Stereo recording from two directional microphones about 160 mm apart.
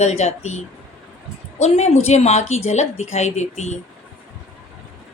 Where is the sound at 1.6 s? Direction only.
45° left (ahead or behind).